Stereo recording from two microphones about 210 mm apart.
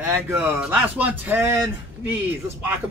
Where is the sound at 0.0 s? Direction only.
10° right (ahead or behind).